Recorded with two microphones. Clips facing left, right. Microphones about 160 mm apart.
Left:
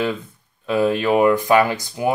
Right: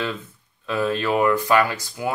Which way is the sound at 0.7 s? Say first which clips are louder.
Left 5 dB; 15° left (ahead or behind).